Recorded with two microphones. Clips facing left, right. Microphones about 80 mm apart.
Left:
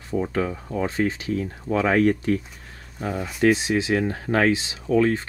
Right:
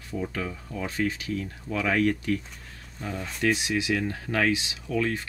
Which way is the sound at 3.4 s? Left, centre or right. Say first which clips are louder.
Left 6 dB; left.